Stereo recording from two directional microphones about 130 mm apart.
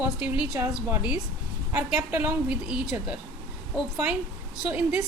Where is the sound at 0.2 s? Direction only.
10° right (ahead or behind).